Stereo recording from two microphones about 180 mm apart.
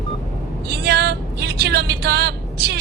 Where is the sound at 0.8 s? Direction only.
60° right (ahead or behind).